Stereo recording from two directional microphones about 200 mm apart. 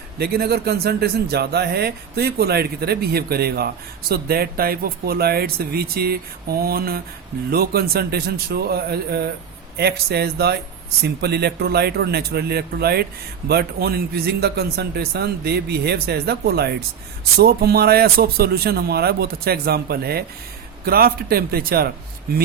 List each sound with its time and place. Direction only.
0.2 s speech: 50° right (ahead or behind)